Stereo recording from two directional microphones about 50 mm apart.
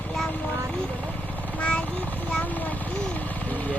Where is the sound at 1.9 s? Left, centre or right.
Left.